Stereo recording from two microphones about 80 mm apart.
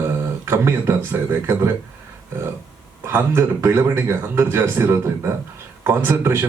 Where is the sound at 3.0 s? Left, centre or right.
Right.